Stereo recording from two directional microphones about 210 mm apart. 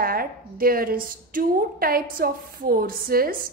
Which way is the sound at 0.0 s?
45° right (ahead or behind).